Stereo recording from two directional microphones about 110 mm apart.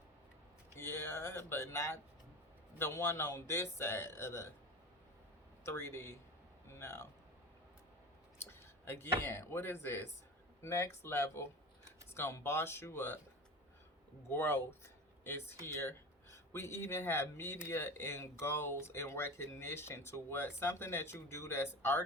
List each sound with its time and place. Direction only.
0.8 s a sound: 20° left (ahead or behind)
2.7 s speech: 20° left (ahead or behind)
5.6 s speech: 25° left (ahead or behind)
8.4 s speech: 20° left (ahead or behind)
14.3 s speech: 20° left (ahead or behind)